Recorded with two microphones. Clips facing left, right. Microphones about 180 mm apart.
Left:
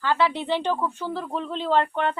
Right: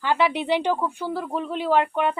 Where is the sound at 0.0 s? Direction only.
15° right (ahead or behind).